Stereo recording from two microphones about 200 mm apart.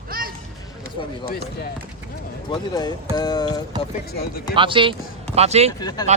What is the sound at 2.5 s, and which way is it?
A man's voice, 20° left (ahead or behind).